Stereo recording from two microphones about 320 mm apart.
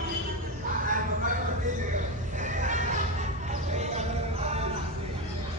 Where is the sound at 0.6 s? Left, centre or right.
Right.